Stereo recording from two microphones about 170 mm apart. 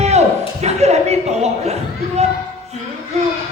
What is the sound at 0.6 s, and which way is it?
Chuckle, 40° right (ahead or behind).